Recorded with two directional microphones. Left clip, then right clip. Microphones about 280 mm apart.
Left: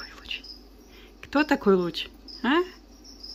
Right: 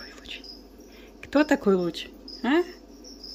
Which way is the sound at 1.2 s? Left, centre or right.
Centre.